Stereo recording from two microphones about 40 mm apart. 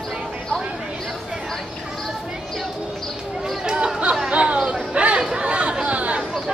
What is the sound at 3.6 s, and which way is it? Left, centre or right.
Chatter, centre.